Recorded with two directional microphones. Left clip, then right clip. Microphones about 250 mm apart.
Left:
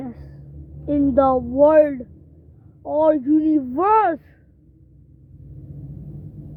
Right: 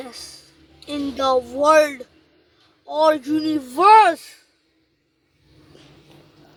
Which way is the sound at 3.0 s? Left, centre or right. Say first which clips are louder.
Left 1 dB; centre.